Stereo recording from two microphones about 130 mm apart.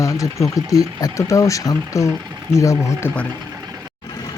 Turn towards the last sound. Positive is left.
turn(degrees=25)  # may be behind; listen again after turning